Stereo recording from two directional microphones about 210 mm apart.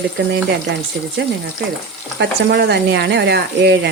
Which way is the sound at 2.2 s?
50° right (ahead or behind).